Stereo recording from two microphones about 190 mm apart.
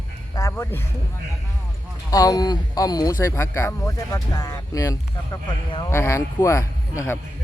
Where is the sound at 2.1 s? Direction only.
20° left (ahead or behind).